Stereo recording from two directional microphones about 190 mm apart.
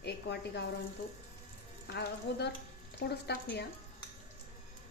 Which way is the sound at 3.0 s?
60° left (ahead or behind).